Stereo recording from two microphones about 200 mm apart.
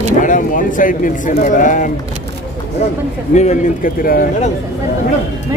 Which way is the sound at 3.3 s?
35° left (ahead or behind).